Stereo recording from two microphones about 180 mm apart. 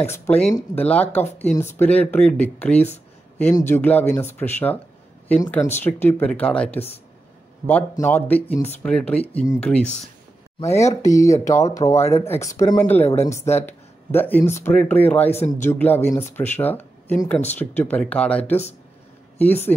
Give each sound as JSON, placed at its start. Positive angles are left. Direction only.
{"t": 0.0, "sound": "speech", "side_deg": 10}
{"t": 15.3, "sound": "speech", "side_deg": 40}
{"t": 15.6, "sound": "speech", "side_deg": 10}